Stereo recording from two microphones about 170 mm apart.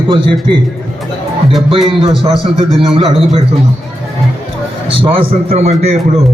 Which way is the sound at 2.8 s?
35° right (ahead or behind).